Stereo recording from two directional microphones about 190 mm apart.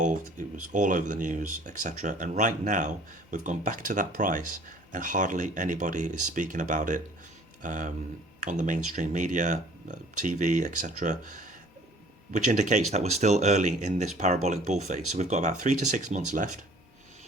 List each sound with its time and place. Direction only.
0.0 s speech: 40° right (ahead or behind)